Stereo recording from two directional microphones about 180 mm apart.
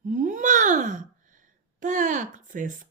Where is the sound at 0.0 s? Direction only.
45° right (ahead or behind).